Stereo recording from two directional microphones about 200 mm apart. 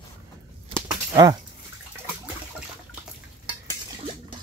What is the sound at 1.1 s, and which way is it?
Speech, 20° right (ahead or behind).